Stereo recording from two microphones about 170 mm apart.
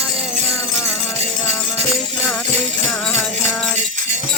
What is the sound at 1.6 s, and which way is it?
Music, 5° left (ahead or behind).